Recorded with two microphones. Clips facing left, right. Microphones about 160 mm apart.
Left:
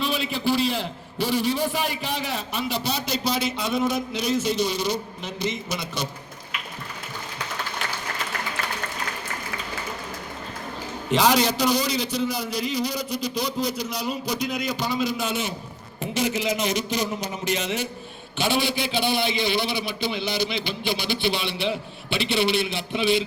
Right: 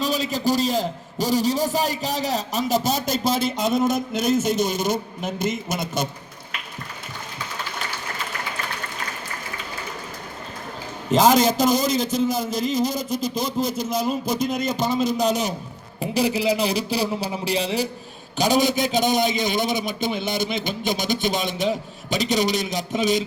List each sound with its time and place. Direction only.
0.0 s a man's voice: 40° right (ahead or behind)
11.1 s a man's voice: 45° right (ahead or behind)
14.6 s a man's voice: centre (ahead or behind)
15.2 s a man's voice: 40° right (ahead or behind)